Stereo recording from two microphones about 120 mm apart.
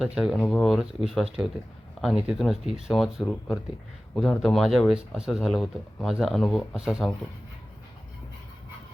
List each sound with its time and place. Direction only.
0.0 s speech: 5° right (ahead or behind)
0.3 s speech: 15° left (ahead or behind)
0.6 s speech: centre (ahead or behind)